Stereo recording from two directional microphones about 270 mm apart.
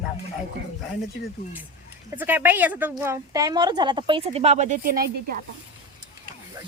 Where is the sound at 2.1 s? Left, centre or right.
Centre; by 5.4 s right.